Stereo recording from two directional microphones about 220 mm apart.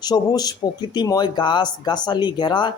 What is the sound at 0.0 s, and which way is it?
Speech, 20° left (ahead or behind).